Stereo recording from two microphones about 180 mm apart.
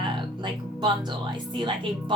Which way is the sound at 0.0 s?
25° right (ahead or behind).